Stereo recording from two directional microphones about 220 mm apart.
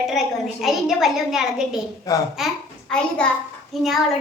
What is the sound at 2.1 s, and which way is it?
Speech, 15° left (ahead or behind).